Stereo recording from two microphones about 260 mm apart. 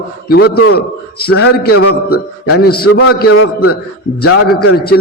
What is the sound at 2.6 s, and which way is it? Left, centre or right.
Speech, left.